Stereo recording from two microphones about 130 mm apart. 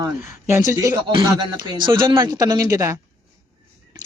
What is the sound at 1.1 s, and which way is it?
Speech, 35° right (ahead or behind).